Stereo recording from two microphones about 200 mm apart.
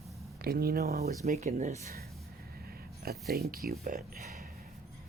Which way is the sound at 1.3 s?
35° right (ahead or behind).